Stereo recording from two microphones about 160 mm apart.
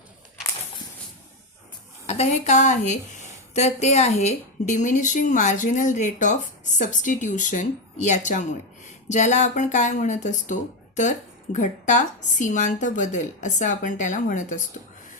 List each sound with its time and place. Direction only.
2.0 s speech: 40° left (ahead or behind)